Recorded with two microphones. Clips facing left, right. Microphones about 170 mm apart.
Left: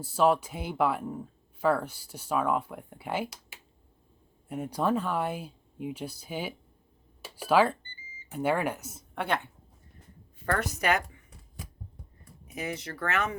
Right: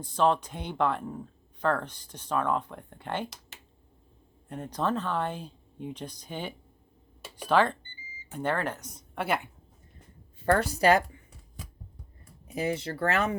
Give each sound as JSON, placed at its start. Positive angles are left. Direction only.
{"t": 0.0, "sound": "speech", "side_deg": 5}
{"t": 10.4, "sound": "speech", "side_deg": -30}
{"t": 12.5, "sound": "speech", "side_deg": -30}